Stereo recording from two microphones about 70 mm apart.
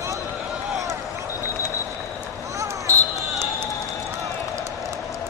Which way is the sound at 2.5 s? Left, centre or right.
Right.